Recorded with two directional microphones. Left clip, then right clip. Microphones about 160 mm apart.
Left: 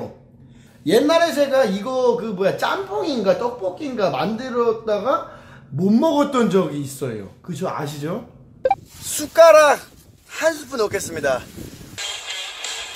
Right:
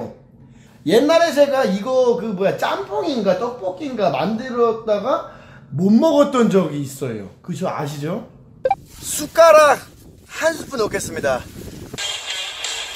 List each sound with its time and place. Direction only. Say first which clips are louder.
0.8 s a man's voice: right 2 dB; 5° right (ahead or behind)
8.6 s music: even; centre (ahead or behind)
9.0 s speech: left 1 dB; 20° left (ahead or behind)
12.0 s music: right 3 dB; 15° right (ahead or behind)